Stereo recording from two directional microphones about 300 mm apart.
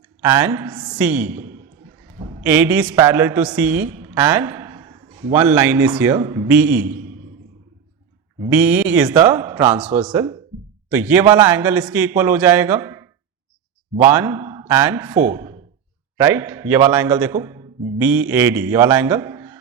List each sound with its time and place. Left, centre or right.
0.2 s a man's voice: centre
2.0 s a sound: centre
2.4 s a man's voice: centre
8.4 s a man's voice: centre